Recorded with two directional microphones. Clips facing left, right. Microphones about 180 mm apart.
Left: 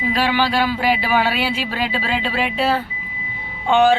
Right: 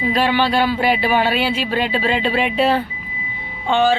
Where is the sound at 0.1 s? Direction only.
10° left (ahead or behind).